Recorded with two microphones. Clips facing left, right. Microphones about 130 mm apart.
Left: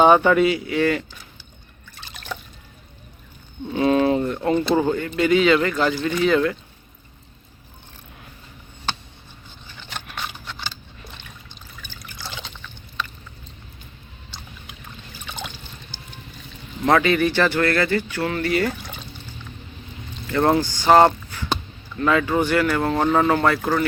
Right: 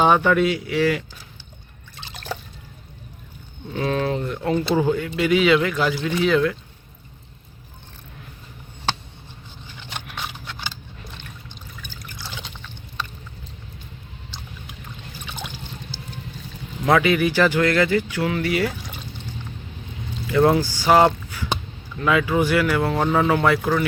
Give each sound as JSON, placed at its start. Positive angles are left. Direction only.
{"t": 0.0, "sound": "speech", "side_deg": 0}
{"t": 2.0, "sound": "liquid", "side_deg": -25}
{"t": 3.7, "sound": "speech", "side_deg": 5}
{"t": 10.1, "sound": "scissors", "side_deg": -5}
{"t": 16.8, "sound": "speech", "side_deg": -5}
{"t": 20.2, "sound": "speech", "side_deg": -5}